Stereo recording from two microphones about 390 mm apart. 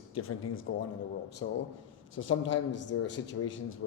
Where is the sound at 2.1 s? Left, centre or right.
Left.